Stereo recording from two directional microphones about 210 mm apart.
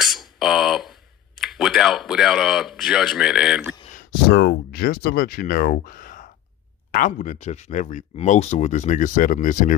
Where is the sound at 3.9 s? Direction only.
45° left (ahead or behind).